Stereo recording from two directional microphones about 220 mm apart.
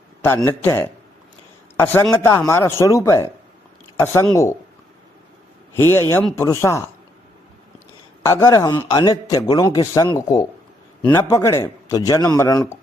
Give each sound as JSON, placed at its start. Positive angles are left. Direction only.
{"t": 0.3, "sound": "a man's voice", "side_deg": 10}
{"t": 5.7, "sound": "a man's voice", "side_deg": 10}
{"t": 8.2, "sound": "a man's voice", "side_deg": 15}